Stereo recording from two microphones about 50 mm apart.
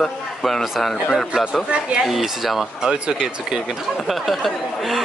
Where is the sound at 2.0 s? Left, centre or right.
Centre.